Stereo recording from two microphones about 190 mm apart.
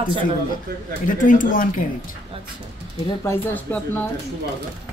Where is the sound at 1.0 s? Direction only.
45° left (ahead or behind).